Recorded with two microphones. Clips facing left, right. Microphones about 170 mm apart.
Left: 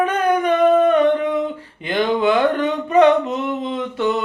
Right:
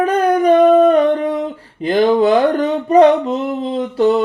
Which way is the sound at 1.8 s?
40° right (ahead or behind).